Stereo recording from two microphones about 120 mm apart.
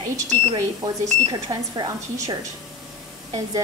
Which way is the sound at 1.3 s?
35° right (ahead or behind).